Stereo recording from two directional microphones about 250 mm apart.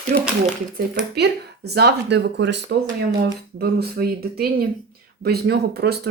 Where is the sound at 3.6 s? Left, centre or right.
Right.